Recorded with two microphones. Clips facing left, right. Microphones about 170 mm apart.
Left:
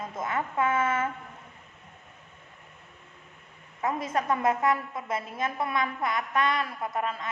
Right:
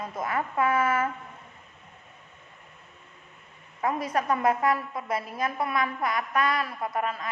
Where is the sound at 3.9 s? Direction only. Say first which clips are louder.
Right 1 dB; 25° left (ahead or behind).